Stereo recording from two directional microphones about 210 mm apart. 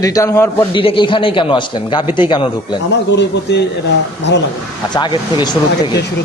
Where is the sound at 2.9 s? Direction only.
55° left (ahead or behind).